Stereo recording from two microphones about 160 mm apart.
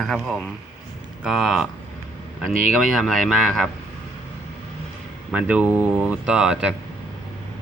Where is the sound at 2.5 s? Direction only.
55° right (ahead or behind).